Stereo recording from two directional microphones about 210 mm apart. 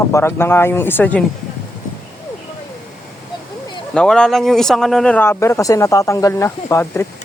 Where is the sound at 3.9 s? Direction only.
5° left (ahead or behind).